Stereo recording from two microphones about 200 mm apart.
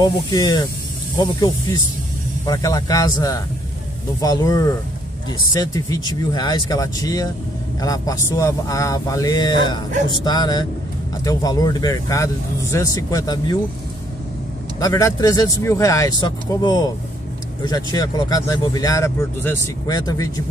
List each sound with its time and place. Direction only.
0.0 s speech: 20° left (ahead or behind)
14.8 s speech: 15° left (ahead or behind)